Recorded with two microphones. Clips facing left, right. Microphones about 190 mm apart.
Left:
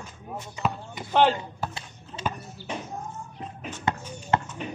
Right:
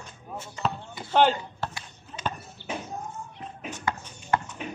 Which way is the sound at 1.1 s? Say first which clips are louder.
Even; centre (ahead or behind).